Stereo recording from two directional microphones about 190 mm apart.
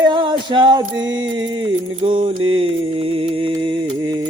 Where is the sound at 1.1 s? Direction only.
25° right (ahead or behind).